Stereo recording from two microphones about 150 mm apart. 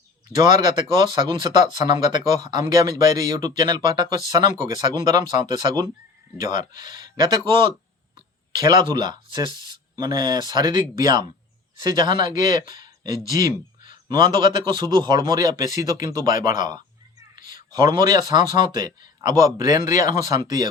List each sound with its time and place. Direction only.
0.7 s speech: 30° right (ahead or behind)
12.5 s speech: 60° left (ahead or behind)
12.7 s a sound: 25° right (ahead or behind)
13.3 s a man's voice: 25° right (ahead or behind)
16.6 s cat: 25° right (ahead or behind)
17.7 s speech: 25° right (ahead or behind)